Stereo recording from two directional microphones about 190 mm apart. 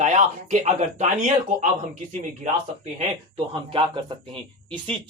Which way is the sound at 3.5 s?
25° right (ahead or behind).